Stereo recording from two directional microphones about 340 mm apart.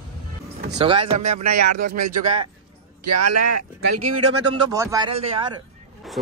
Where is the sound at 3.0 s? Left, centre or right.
Right.